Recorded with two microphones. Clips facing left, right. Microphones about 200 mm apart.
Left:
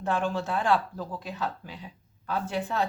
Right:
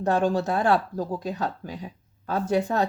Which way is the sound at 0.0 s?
40° right (ahead or behind).